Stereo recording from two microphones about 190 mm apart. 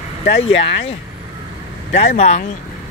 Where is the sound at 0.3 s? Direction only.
30° left (ahead or behind).